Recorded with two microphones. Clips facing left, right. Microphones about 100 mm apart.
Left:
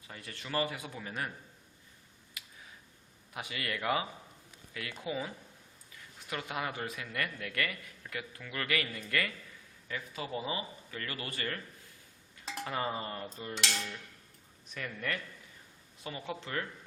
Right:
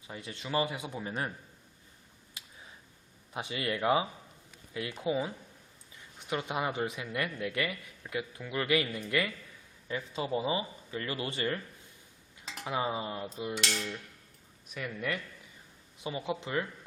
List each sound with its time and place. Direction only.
0.1 s a man's voice: 20° right (ahead or behind)
2.4 s a sound: 30° right (ahead or behind)
3.3 s a man's voice: 25° right (ahead or behind)
12.6 s dishes: 10° right (ahead or behind)